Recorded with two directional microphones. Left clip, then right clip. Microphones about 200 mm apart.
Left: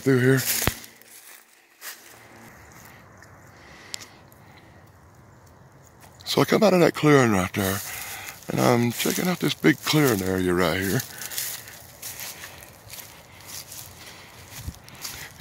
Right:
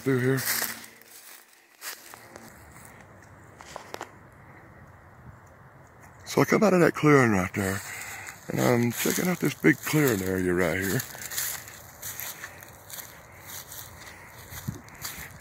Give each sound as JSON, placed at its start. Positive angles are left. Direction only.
{"t": 0.0, "sound": "speech", "side_deg": 30}
{"t": 6.3, "sound": "speech", "side_deg": 0}
{"t": 9.0, "sound": "speech", "side_deg": 0}